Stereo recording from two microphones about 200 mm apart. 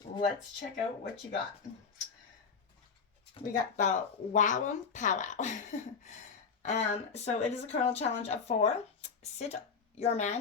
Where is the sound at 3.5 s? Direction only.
40° left (ahead or behind).